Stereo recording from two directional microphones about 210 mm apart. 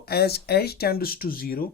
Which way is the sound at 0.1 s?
50° left (ahead or behind).